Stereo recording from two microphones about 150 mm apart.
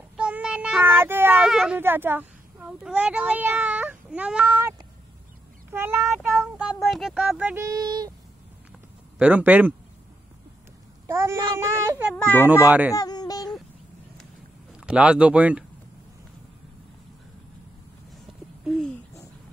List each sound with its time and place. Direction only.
0.2 s child singing: 5° right (ahead or behind)
1.8 s speech: 15° right (ahead or behind)
4.5 s speech: 20° right (ahead or behind)
6.3 s child singing: 10° right (ahead or behind)
6.9 s speech: centre (ahead or behind)
7.6 s a child's voice: 25° right (ahead or behind)
9.2 s speech: 10° right (ahead or behind)
11.1 s a child's voice: 20° right (ahead or behind)
12.2 s a child's voice: 10° left (ahead or behind)
12.6 s speech: 10° right (ahead or behind)
12.9 s a sound: 25° left (ahead or behind)
14.9 s speech: 10° right (ahead or behind)